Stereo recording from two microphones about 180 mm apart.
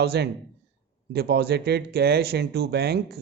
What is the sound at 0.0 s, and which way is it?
Speech, 65° right (ahead or behind).